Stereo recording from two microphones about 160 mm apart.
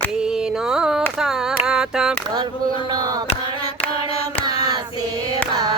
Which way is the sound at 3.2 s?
35° left (ahead or behind).